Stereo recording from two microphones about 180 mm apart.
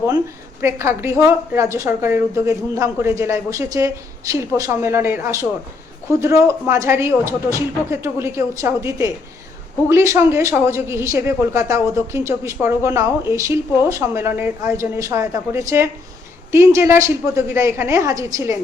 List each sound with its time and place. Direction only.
0.6 s a woman's voice: 15° right (ahead or behind)